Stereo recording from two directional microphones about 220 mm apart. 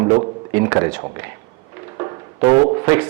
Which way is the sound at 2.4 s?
15° right (ahead or behind).